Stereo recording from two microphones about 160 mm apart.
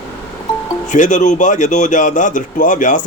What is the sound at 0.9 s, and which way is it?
Speech, 50° left (ahead or behind).